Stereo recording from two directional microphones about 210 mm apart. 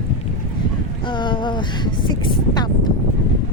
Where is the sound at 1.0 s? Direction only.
25° left (ahead or behind).